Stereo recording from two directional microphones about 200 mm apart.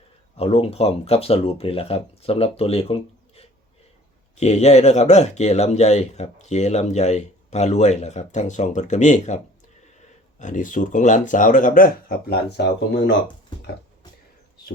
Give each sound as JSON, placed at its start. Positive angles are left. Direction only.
{"t": 0.3, "sound": "speech", "side_deg": 30}